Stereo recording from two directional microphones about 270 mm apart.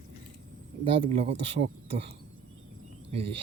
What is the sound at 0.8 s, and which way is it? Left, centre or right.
Speech, centre.